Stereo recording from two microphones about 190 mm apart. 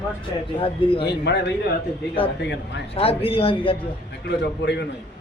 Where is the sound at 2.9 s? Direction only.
30° left (ahead or behind).